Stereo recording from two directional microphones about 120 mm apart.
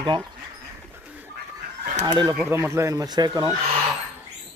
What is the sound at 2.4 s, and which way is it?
Speech, 20° right (ahead or behind).